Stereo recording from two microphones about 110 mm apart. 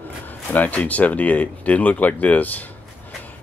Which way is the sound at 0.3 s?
15° left (ahead or behind).